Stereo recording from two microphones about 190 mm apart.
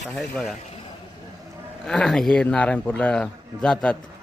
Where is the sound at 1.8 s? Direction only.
5° left (ahead or behind).